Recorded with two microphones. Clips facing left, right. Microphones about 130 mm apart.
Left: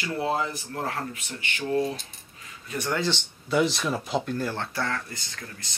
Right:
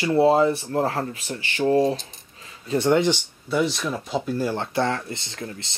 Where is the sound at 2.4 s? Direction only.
25° right (ahead or behind).